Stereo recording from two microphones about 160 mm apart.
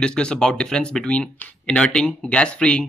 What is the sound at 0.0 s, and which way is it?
Speech, 5° left (ahead or behind).